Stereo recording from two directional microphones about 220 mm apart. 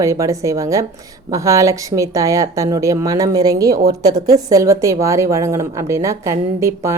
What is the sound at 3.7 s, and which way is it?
Speech, 45° right (ahead or behind).